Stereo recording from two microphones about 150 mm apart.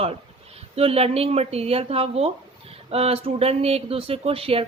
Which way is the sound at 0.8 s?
40° right (ahead or behind).